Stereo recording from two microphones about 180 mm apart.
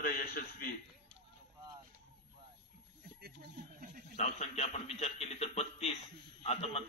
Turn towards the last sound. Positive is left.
turn(degrees=35)  # may be behind; listen again after turning